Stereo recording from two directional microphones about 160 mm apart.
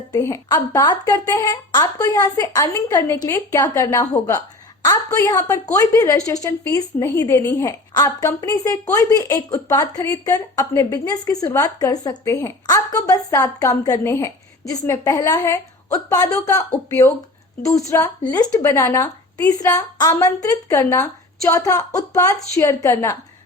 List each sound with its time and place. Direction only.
0.1 s a woman's voice: 20° left (ahead or behind)